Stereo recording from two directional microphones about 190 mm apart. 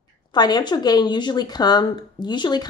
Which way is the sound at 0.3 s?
20° left (ahead or behind).